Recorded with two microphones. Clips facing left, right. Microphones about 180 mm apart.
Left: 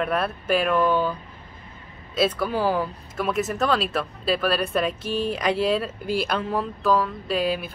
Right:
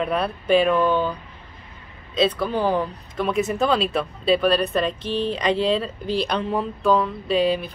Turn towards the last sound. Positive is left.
turn(degrees=5)  # may be behind; listen again after turning